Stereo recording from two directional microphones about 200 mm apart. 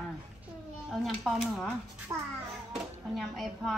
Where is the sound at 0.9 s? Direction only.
Centre (ahead or behind).